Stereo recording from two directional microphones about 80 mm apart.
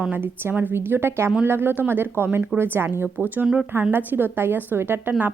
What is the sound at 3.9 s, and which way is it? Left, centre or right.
A woman's voice, right.